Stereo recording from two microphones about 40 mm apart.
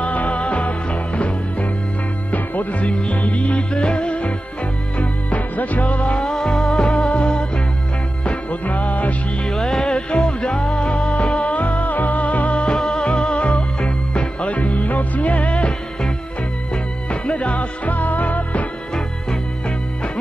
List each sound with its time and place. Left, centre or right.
0.0 s music: left
2.3 s music: left
2.8 s music: left
6.2 s music: centre
8.2 s music: left
9.4 s music: centre; by 15.7 s left
16.7 s music: left